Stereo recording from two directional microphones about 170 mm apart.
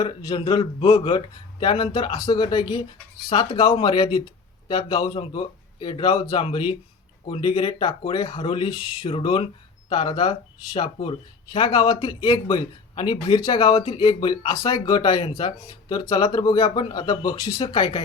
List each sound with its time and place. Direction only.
0.0 s speech: 30° left (ahead or behind)
16.6 s speech: 35° left (ahead or behind)
16.9 s speech: 25° left (ahead or behind)